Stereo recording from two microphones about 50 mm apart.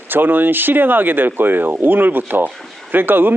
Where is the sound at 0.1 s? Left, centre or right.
Right.